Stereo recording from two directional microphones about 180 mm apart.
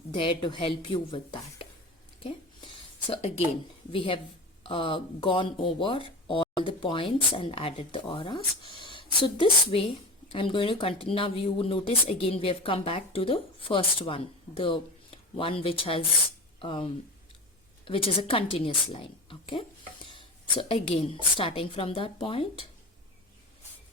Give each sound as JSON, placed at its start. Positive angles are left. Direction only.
{"t": 0.1, "sound": "speech", "side_deg": 25}
{"t": 2.2, "sound": "a sound", "side_deg": 25}
{"t": 3.9, "sound": "speech", "side_deg": 30}